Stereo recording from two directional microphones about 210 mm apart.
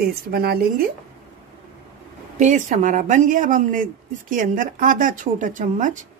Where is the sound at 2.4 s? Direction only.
35° right (ahead or behind).